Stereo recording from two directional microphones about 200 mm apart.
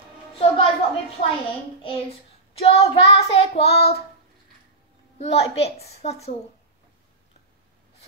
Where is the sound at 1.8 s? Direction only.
30° left (ahead or behind).